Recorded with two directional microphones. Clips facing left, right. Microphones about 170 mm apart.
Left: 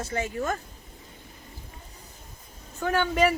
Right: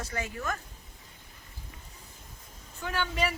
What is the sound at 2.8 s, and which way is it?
Speech, 50° left (ahead or behind).